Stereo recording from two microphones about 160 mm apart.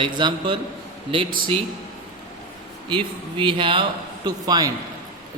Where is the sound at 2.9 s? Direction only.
30° right (ahead or behind).